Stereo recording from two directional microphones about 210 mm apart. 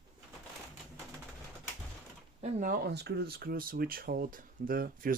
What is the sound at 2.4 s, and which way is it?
Speech, 35° right (ahead or behind).